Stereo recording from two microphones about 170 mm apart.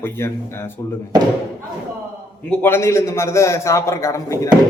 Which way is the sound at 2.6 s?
15° left (ahead or behind).